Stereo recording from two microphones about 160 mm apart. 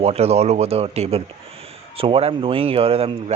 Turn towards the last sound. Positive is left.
turn(degrees=-35)  # may be behind; listen again after turning